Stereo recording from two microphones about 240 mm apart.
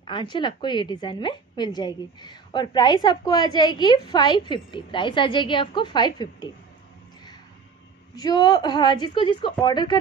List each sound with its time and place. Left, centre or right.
0.0 s a woman's voice: centre
8.2 s a woman's voice: centre